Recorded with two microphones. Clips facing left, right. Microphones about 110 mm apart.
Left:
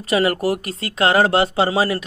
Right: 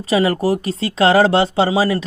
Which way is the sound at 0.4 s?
30° right (ahead or behind).